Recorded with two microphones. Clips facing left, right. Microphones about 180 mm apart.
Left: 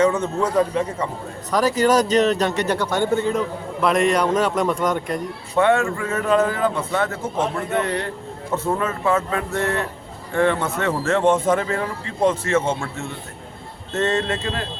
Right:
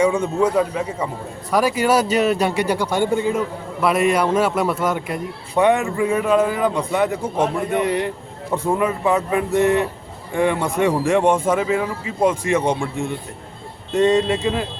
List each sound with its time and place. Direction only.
0.0 s a man's voice: 10° right (ahead or behind)